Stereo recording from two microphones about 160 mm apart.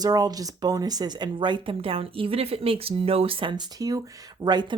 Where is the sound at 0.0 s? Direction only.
25° right (ahead or behind).